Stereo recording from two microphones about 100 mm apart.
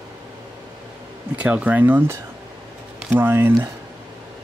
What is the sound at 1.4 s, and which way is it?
Speech, 15° right (ahead or behind).